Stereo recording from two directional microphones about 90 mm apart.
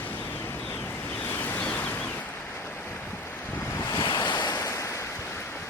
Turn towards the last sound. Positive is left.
turn(degrees=35)  # may be behind; listen again after turning